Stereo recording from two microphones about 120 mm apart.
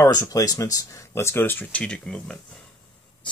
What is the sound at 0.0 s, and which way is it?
Speech, 30° left (ahead or behind).